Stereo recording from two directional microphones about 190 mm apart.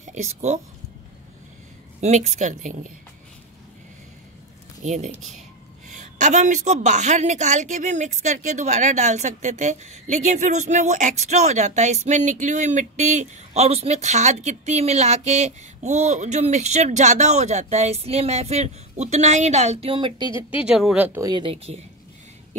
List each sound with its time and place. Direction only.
0.0 s speech: 40° right (ahead or behind)
2.0 s a woman's voice: 40° right (ahead or behind)
4.8 s a woman's voice: 40° right (ahead or behind)
20.5 s speech: 5° right (ahead or behind); by 21.8 s 30° right (ahead or behind)